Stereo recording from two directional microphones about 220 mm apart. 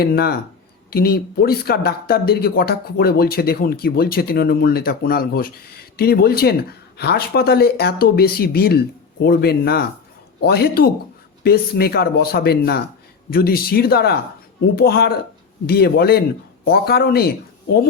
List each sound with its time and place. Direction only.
0.0 s speech: 45° left (ahead or behind)